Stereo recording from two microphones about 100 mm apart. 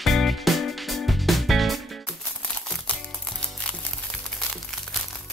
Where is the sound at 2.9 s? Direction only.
15° left (ahead or behind).